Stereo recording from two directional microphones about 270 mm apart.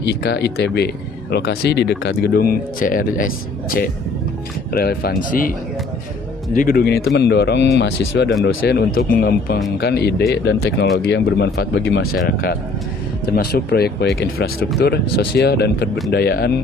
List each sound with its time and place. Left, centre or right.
0.1 s speech: left
13.3 s speech: left